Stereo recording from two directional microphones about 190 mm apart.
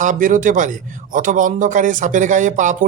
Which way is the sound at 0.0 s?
45° right (ahead or behind).